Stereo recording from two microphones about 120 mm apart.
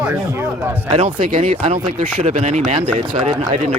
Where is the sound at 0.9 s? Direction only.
60° right (ahead or behind).